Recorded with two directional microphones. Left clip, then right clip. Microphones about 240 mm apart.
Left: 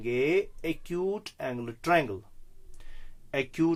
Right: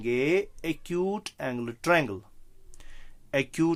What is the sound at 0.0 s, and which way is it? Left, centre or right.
Speech, right.